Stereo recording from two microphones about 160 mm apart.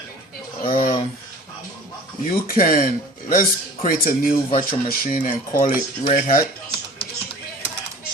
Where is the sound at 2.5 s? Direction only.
65° left (ahead or behind).